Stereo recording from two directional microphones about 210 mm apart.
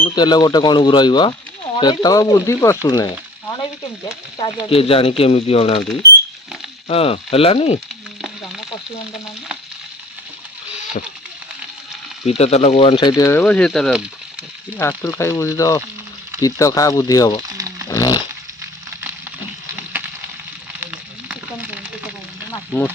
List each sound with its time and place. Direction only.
0.0 s speech: 20° left (ahead or behind)
2.8 s frying: 15° left (ahead or behind)
4.4 s speech: 25° left (ahead or behind)
6.8 s speech: 25° left (ahead or behind)
8.2 s frying: centre (ahead or behind)
11.0 s speech: 35° left (ahead or behind)
12.2 s speech: 30° left (ahead or behind); by 14.1 s centre (ahead or behind)
14.8 s speech: 10° left (ahead or behind)
17.8 s dog: 15° left (ahead or behind)
20.8 s sizzle: 5° right (ahead or behind)
22.5 s a sound: 10° left (ahead or behind)